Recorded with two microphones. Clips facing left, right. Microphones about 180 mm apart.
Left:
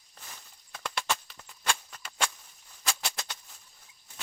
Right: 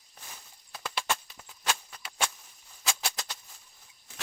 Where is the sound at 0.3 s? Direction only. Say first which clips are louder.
Right 1 dB; 5° right (ahead or behind).